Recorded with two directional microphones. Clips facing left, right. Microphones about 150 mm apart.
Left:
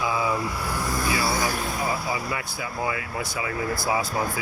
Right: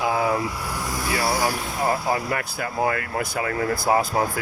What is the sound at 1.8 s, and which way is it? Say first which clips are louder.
Speech: right 9 dB; 50° right (ahead or behind).